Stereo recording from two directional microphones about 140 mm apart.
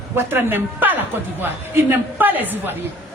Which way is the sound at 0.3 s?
15° right (ahead or behind).